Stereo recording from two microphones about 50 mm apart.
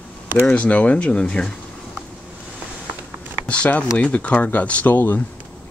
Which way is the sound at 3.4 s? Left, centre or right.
Left.